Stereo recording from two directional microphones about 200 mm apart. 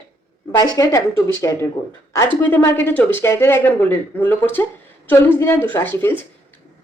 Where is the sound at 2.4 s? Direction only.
10° left (ahead or behind).